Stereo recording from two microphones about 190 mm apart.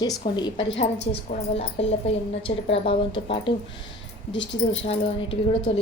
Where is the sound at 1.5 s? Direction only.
30° left (ahead or behind).